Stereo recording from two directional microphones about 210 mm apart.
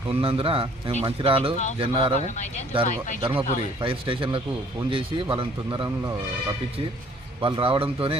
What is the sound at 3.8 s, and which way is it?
Speech, 25° right (ahead or behind).